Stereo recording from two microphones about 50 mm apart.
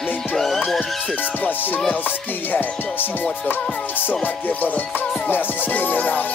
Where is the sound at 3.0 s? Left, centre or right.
Left.